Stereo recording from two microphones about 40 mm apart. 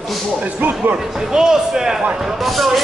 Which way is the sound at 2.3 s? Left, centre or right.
Centre.